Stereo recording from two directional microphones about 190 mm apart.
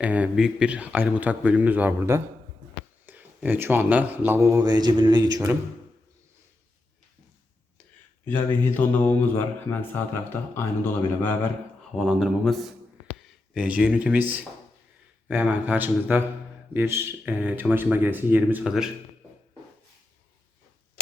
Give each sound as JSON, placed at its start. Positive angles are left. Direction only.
{"t": 0.0, "sound": "speech", "side_deg": -5}
{"t": 8.2, "sound": "speech", "side_deg": 10}
{"t": 11.9, "sound": "speech", "side_deg": 0}